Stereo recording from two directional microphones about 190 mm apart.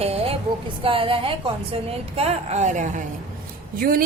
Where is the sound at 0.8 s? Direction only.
30° right (ahead or behind).